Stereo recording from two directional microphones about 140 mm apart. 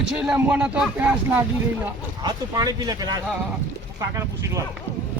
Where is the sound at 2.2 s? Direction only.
25° right (ahead or behind).